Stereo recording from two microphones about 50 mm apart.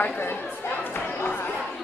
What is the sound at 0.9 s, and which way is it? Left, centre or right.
Chatter, left.